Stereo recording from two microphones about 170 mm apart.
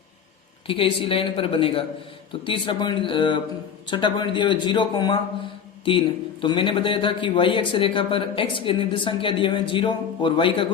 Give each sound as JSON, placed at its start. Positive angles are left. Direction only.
{"t": 0.7, "sound": "speech", "side_deg": 30}
{"t": 6.4, "sound": "speech", "side_deg": 30}